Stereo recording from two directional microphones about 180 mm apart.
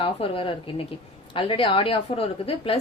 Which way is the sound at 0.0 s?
30° left (ahead or behind).